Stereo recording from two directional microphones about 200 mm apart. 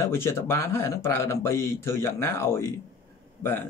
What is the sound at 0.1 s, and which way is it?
Speech, 10° left (ahead or behind).